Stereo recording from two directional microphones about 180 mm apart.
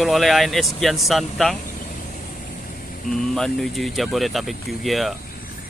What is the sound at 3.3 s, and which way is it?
Speech, centre (ahead or behind).